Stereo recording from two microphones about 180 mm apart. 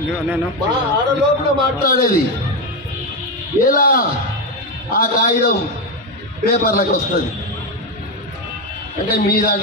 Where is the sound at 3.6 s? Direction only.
50° left (ahead or behind).